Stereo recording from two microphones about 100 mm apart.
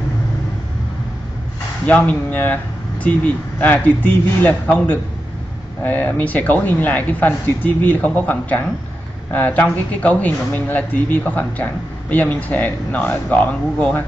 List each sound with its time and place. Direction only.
1.9 s speech: 15° left (ahead or behind)